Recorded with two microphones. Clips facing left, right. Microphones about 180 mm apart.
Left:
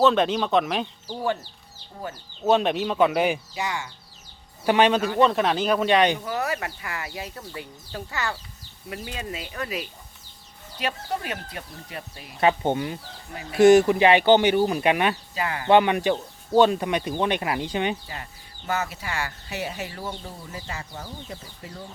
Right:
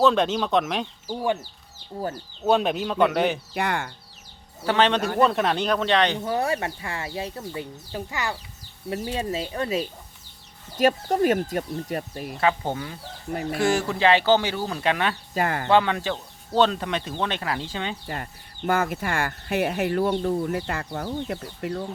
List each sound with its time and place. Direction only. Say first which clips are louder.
0.0 s speech: even; centre (ahead or behind)
1.0 s speech: right 4 dB; 15° right (ahead or behind)
2.4 s speech: left 1 dB; centre (ahead or behind)
3.5 s speech: right 4 dB; 60° right (ahead or behind)
4.6 s speech: left 2 dB; 15° left (ahead or behind)
6.1 s speech: right 3 dB; 30° right (ahead or behind)
8.9 s speech: right 6 dB; 30° right (ahead or behind)
10.8 s speech: right 9 dB; 45° right (ahead or behind)
12.4 s speech: left 3 dB; 20° left (ahead or behind)
15.4 s speech: right 4 dB; 50° right (ahead or behind)
15.7 s speech: left 4 dB; 15° left (ahead or behind)
18.0 s speech: right 5 dB; 55° right (ahead or behind)